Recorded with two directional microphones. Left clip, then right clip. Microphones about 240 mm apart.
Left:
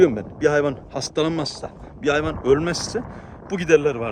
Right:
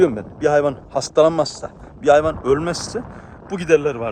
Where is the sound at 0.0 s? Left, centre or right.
Centre.